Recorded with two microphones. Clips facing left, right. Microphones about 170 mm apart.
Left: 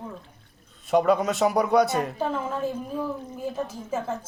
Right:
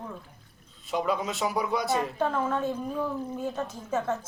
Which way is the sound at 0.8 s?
50° left (ahead or behind).